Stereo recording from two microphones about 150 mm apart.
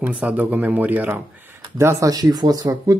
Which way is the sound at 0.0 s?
10° right (ahead or behind).